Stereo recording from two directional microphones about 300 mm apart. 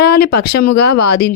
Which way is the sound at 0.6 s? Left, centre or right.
Left.